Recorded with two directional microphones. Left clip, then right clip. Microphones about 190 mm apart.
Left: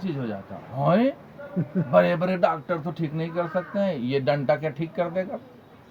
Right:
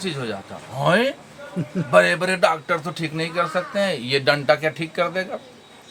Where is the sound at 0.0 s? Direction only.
20° right (ahead or behind).